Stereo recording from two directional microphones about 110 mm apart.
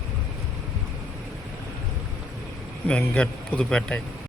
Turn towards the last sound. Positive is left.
turn(degrees=10)  # may be behind; listen again after turning